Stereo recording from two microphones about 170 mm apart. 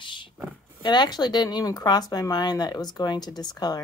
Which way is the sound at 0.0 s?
30° left (ahead or behind).